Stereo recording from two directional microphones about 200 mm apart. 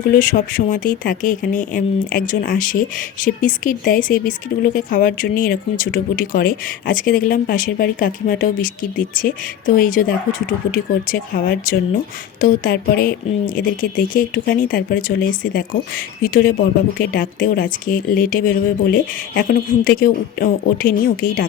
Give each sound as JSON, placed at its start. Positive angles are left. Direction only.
{"t": 0.2, "sound": "speech", "side_deg": 45}